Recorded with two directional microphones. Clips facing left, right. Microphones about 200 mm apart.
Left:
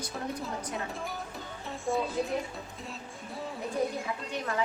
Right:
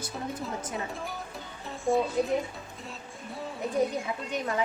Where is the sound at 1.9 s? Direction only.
20° right (ahead or behind).